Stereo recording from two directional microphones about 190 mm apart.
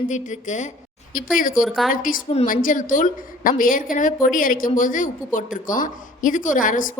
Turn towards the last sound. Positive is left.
turn(degrees=45)  # may be behind; listen again after turning